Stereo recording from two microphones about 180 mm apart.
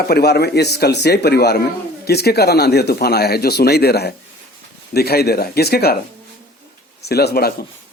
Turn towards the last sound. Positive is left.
turn(degrees=60)  # may be behind; listen again after turning